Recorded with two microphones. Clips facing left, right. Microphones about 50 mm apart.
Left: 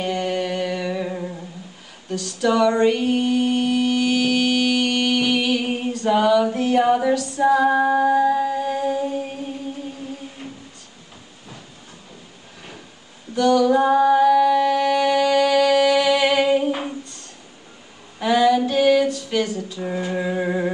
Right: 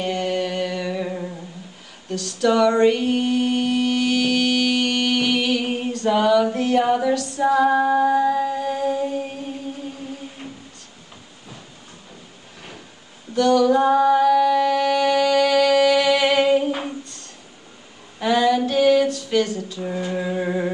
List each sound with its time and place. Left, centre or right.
0.0 s a sound: centre
2.4 s mantra: centre
7.4 s female singing: centre
13.4 s female singing: centre
18.2 s female singing: centre
19.0 s a sound: centre
19.8 s music: left